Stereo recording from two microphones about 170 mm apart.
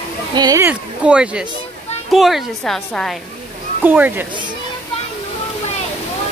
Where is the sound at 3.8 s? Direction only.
10° right (ahead or behind).